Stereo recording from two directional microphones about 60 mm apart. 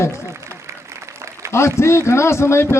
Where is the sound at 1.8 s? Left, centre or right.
Left.